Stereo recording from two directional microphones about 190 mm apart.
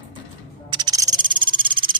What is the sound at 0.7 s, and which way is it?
Cricket, 20° right (ahead or behind).